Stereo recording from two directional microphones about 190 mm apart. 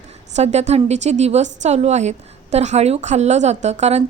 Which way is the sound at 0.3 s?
35° right (ahead or behind).